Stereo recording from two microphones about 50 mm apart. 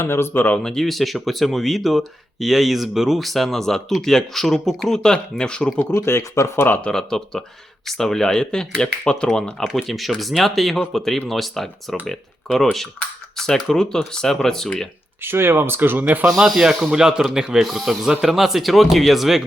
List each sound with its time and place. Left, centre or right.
0.0 s speech: left
0.6 s speech: centre
5.9 s speech: left
6.6 s speech: left
6.9 s speech: centre
9.7 s speech: centre
15.2 s speech: right
16.4 s a man's voice: centre